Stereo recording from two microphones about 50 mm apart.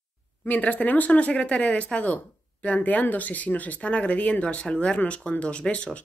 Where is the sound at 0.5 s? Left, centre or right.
Left.